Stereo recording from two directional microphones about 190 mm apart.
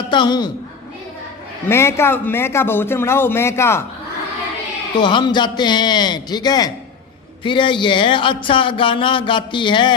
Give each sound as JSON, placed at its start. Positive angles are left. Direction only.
{"t": 0.1, "sound": "speech", "side_deg": 25}
{"t": 1.6, "sound": "a man's voice", "side_deg": 15}
{"t": 4.9, "sound": "speech", "side_deg": 25}